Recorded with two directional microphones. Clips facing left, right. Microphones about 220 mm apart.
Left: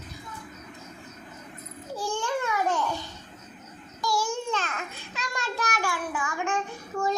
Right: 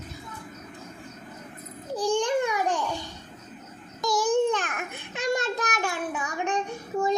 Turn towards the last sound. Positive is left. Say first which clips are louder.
# right 3 dB
turn(degrees=-20)  # may be behind; listen again after turning